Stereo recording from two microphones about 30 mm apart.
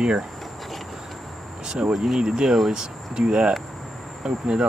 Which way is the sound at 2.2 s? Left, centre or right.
Right.